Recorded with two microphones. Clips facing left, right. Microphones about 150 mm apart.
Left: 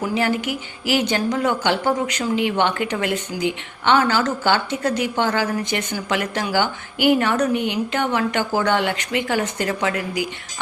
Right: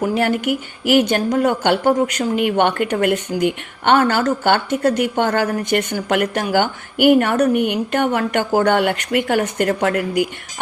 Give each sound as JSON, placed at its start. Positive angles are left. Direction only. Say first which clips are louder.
{"t": 0.0, "sound": "speech", "louder": "right 3 dB", "side_deg": -55}